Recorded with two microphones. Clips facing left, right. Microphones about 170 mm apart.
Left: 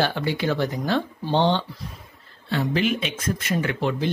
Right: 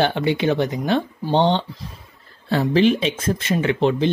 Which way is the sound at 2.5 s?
30° right (ahead or behind).